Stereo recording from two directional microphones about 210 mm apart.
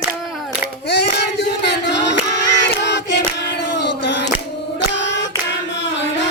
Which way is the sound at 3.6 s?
55° left (ahead or behind).